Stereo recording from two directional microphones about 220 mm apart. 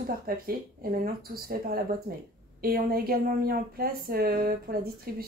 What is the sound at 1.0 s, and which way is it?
Speech, 40° right (ahead or behind).